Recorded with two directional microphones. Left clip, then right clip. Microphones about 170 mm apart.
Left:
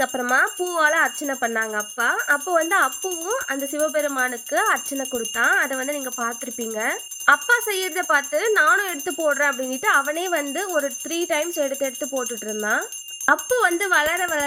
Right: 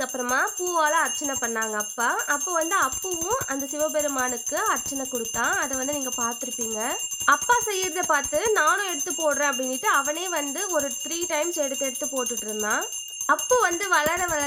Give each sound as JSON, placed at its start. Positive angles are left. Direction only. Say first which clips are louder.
{"t": 0.0, "sound": "speech", "louder": "left 5 dB", "side_deg": 20}